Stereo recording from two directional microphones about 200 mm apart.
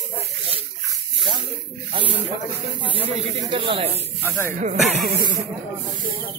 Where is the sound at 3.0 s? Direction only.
25° right (ahead or behind).